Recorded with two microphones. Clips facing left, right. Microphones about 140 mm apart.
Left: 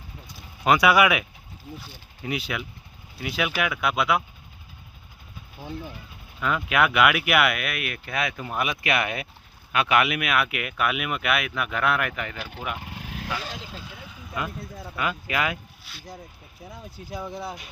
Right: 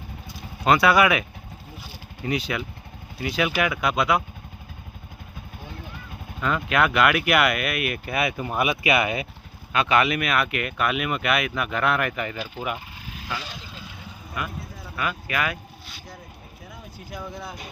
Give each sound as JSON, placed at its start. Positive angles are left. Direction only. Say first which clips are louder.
{"t": 0.6, "sound": "speech", "louder": "right 1 dB", "side_deg": 10}
{"t": 2.2, "sound": "speech", "louder": "right 3 dB", "side_deg": 5}
{"t": 6.4, "sound": "speech", "louder": "right 1 dB", "side_deg": 5}
{"t": 12.8, "sound": "vehicle", "louder": "left 4 dB", "side_deg": 65}
{"t": 14.4, "sound": "speech", "louder": "left 1 dB", "side_deg": 25}